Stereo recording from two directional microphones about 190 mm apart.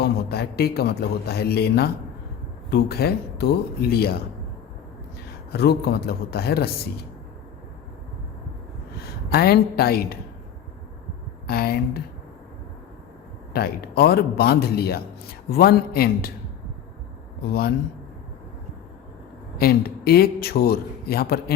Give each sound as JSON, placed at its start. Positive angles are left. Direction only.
{"t": 0.0, "sound": "a man's voice", "side_deg": 55}
{"t": 5.5, "sound": "a man's voice", "side_deg": 60}
{"t": 9.3, "sound": "a man's voice", "side_deg": 55}
{"t": 11.4, "sound": "a woman's voice", "side_deg": 55}
{"t": 13.5, "sound": "a man's voice", "side_deg": 55}
{"t": 17.4, "sound": "a man's voice", "side_deg": 55}
{"t": 19.5, "sound": "a man's voice", "side_deg": 55}